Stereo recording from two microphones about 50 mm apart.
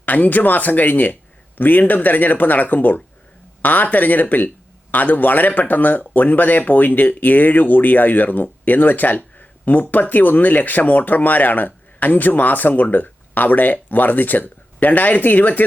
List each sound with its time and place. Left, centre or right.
0.0 s speech: left